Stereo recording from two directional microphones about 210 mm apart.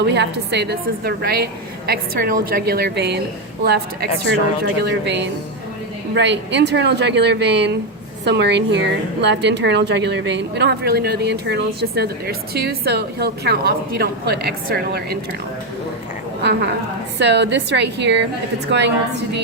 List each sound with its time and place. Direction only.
0.0 s a woman's voice: 55° right (ahead or behind)
4.6 s a woman's voice: 55° right (ahead or behind)
16.4 s a woman's voice: 55° right (ahead or behind)